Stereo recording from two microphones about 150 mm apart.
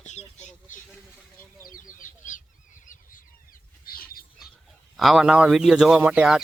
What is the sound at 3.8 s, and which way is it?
Squawk, 80° left.